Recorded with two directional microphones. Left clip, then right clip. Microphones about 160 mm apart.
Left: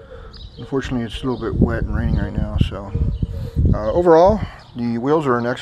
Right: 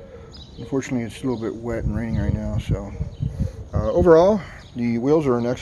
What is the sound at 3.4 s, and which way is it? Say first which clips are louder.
Speech: left 4 dB; 25° right (ahead or behind).